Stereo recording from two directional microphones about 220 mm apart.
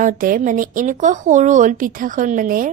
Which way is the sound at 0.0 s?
40° right (ahead or behind).